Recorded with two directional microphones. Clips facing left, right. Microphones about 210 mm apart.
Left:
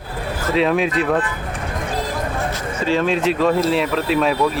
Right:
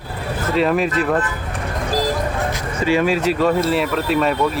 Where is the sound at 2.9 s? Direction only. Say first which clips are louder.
Right 1 dB; 10° right (ahead or behind).